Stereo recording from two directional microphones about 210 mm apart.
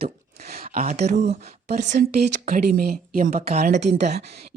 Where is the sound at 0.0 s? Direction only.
45° right (ahead or behind).